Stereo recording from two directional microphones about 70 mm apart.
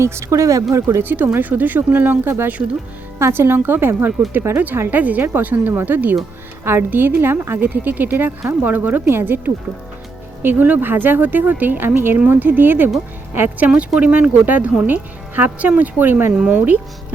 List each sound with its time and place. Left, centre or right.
0.0 s speech: right
1.0 s speech: right
3.2 s a woman's voice: right
13.7 s speech: centre
16.3 s speech: centre